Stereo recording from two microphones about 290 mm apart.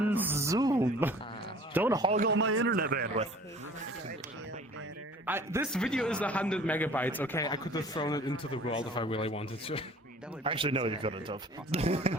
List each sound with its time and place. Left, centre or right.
0.1 s a sound: centre
1.7 s a man's voice: centre
2.1 s speech: right
2.4 s a man's voice: right
2.7 s a man's voice: right
5.2 s a man's voice: centre
5.7 s a man's voice: centre
10.4 s a man's voice: centre